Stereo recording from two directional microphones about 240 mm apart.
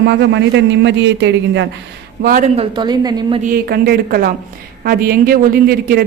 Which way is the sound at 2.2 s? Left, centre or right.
Right.